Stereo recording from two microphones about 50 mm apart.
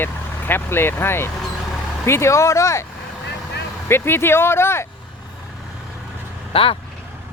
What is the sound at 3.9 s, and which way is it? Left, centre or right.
Speech, left.